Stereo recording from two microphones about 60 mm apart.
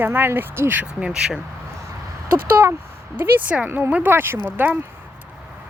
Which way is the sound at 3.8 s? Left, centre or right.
Right.